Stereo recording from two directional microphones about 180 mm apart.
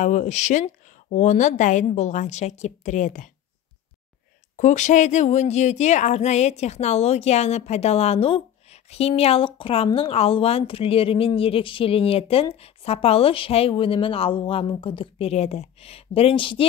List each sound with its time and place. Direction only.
0.0 s speech: 40° left (ahead or behind)
4.6 s speech: 40° left (ahead or behind)